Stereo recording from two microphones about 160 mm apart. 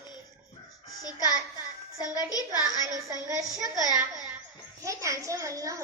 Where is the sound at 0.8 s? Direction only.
20° left (ahead or behind).